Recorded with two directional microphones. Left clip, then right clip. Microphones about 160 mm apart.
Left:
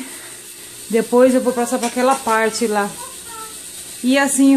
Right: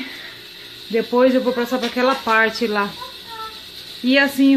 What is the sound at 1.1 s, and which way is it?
Speech, 10° left (ahead or behind).